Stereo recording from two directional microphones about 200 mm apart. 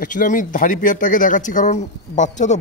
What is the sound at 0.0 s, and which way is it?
Speech, 40° left (ahead or behind).